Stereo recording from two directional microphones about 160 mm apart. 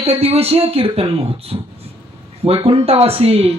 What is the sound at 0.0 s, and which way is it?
A woman's voice, 35° right (ahead or behind).